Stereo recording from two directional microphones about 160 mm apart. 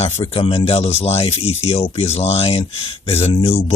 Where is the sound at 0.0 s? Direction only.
35° left (ahead or behind).